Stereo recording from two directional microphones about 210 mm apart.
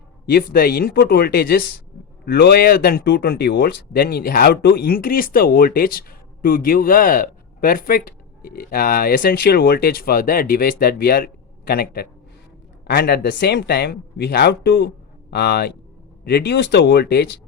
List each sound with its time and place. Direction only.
0.3 s speech: 45° left (ahead or behind)